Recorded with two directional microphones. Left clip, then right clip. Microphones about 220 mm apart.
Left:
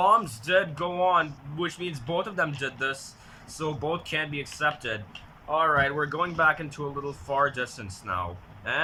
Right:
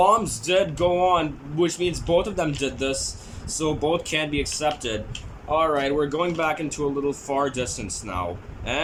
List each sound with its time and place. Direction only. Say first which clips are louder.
0.0 s speech: right 3 dB; 20° right (ahead or behind)